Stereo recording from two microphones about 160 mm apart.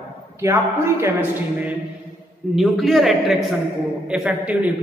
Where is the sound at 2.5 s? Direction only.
Centre (ahead or behind).